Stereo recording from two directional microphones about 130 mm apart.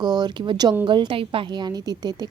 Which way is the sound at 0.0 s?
35° right (ahead or behind).